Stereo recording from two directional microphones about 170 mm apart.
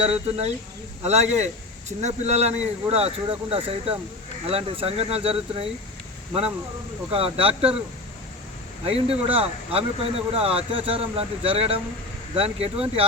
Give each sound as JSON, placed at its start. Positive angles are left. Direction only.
{"t": 0.0, "sound": "speech", "side_deg": -40}
{"t": 7.1, "sound": "speech", "side_deg": -35}
{"t": 8.8, "sound": "speech", "side_deg": -35}